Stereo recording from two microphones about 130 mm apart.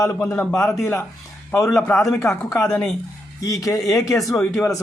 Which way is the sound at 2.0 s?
20° left (ahead or behind).